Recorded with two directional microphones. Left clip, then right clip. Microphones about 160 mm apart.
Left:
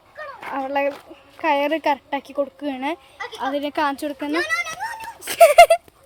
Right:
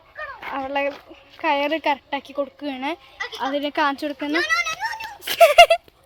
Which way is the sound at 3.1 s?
35° left (ahead or behind).